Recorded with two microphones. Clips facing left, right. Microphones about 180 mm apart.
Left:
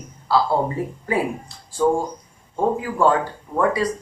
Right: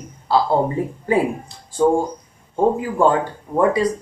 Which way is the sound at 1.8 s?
25° right (ahead or behind).